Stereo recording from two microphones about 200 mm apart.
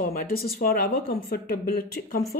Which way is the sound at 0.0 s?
45° left (ahead or behind).